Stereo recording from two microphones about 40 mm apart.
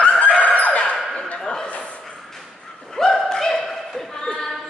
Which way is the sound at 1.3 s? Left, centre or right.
Centre.